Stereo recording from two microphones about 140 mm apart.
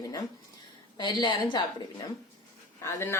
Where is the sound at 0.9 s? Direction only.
30° left (ahead or behind).